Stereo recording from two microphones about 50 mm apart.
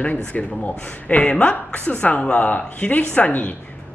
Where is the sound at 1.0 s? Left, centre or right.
Left.